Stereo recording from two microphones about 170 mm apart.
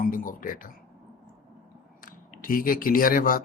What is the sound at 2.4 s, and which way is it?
Speech, 55° left (ahead or behind).